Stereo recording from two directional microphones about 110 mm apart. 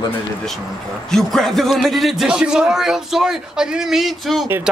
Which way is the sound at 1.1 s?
Centre (ahead or behind).